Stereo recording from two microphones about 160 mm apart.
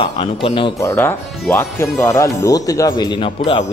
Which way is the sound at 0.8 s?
15° left (ahead or behind).